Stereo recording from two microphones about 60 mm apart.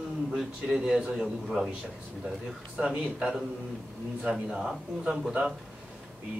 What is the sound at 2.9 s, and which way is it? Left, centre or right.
Speech, centre.